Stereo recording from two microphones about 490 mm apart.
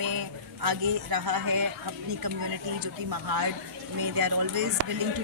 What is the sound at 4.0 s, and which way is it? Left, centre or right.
Speech, right.